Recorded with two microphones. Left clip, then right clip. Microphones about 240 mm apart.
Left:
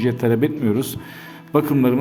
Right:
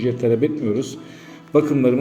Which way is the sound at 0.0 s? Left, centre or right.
Left.